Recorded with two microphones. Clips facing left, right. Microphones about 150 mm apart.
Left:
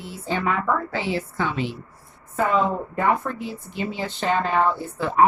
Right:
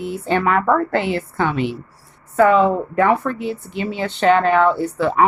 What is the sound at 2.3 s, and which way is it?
Speech, 75° right (ahead or behind).